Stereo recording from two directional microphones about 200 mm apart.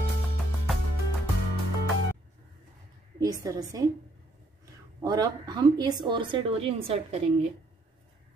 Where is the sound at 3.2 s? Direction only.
15° right (ahead or behind).